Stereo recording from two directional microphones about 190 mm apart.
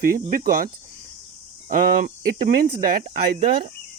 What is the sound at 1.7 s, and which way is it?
Speech, 45° right (ahead or behind).